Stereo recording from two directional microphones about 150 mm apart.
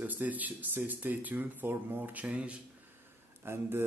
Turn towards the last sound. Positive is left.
turn(degrees=-15)  # may be behind; listen again after turning